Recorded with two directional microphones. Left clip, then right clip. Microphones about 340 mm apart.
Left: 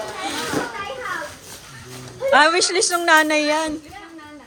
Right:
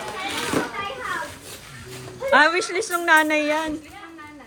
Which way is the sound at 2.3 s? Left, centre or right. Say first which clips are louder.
Left 2 dB; centre.